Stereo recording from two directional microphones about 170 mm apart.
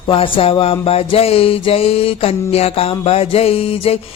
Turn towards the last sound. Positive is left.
turn(degrees=35)  # may be behind; listen again after turning